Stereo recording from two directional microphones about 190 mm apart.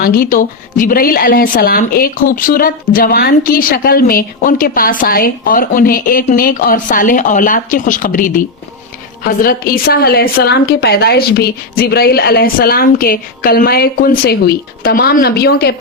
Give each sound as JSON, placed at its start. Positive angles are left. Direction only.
{"t": 0.0, "sound": "a woman's voice", "side_deg": 50}